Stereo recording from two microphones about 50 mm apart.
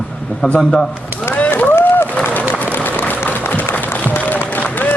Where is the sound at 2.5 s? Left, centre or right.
Left.